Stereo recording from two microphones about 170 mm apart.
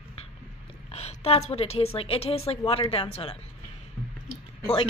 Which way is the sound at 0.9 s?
40° left (ahead or behind).